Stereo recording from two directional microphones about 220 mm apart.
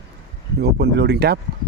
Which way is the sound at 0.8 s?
50° right (ahead or behind).